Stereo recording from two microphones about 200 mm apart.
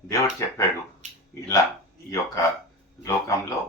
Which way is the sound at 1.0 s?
35° right (ahead or behind).